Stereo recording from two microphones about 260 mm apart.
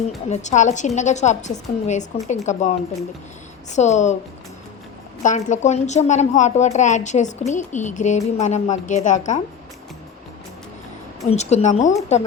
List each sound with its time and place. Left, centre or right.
0.3 s a woman's voice: left
5.2 s a woman's voice: left
11.3 s a woman's voice: left